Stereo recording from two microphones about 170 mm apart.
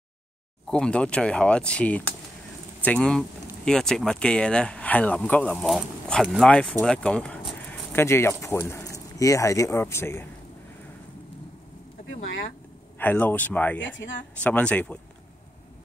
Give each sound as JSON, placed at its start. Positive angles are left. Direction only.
{"t": 0.7, "sound": "speech", "side_deg": 5}
{"t": 12.0, "sound": "a sound", "side_deg": 50}
{"t": 13.0, "sound": "speech", "side_deg": 10}
{"t": 13.7, "sound": "speech", "side_deg": 90}
{"t": 14.4, "sound": "speech", "side_deg": 5}